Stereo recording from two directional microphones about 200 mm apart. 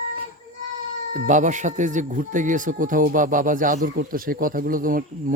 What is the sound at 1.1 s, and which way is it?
Speech, 40° right (ahead or behind).